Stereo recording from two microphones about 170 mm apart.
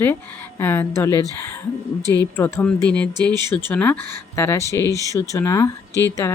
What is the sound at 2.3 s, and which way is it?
Speech, 10° left (ahead or behind).